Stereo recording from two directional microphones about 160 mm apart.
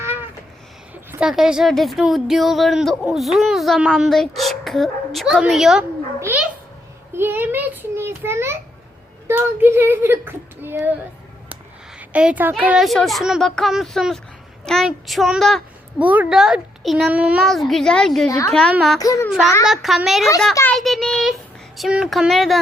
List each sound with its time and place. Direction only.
0.0 s a sound: 15° right (ahead or behind)
1.1 s speech: 5° right (ahead or behind)
6.1 s a sound: 15° right (ahead or behind)
9.2 s speech: 15° right (ahead or behind)
11.9 s speech: 10° right (ahead or behind)
16.0 s speech: 10° right (ahead or behind)
18.3 s a child's voice: 20° left (ahead or behind)
19.6 s speech: centre (ahead or behind)